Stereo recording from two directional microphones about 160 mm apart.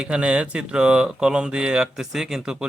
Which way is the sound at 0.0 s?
5° right (ahead or behind).